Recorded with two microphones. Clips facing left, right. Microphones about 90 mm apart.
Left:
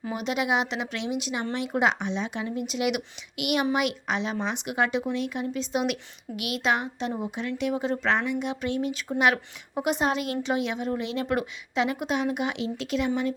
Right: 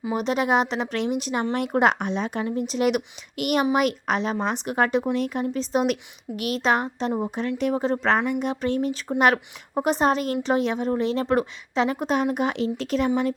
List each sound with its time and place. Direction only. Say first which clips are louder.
0.1 s speech: right 4 dB; 40° right (ahead or behind)